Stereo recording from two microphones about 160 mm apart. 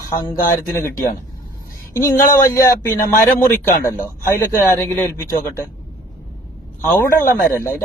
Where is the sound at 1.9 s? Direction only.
20° left (ahead or behind).